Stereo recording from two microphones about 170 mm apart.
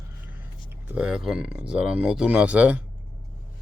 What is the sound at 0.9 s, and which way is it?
Speech, 5° right (ahead or behind).